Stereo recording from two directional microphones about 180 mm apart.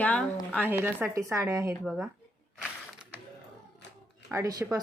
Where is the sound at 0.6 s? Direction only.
10° right (ahead or behind).